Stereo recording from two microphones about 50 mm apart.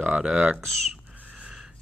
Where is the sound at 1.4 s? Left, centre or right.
Centre.